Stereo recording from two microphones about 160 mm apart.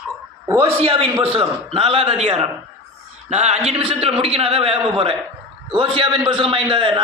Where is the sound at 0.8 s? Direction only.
35° right (ahead or behind).